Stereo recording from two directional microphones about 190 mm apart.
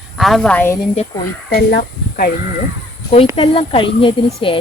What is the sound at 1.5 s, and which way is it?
Speech, 55° left (ahead or behind).